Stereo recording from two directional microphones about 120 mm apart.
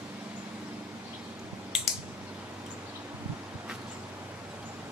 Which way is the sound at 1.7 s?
5° right (ahead or behind).